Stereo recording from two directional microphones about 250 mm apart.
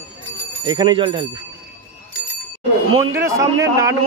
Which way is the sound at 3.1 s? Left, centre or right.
Centre.